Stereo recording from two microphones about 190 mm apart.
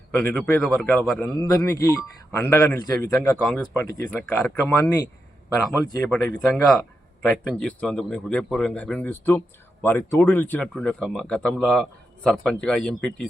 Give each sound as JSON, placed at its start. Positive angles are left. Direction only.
{"t": 0.1, "sound": "speech", "side_deg": 10}
{"t": 1.7, "sound": "a man's voice", "side_deg": 15}
{"t": 3.4, "sound": "a man's voice", "side_deg": 5}
{"t": 6.0, "sound": "a man's voice", "side_deg": 0}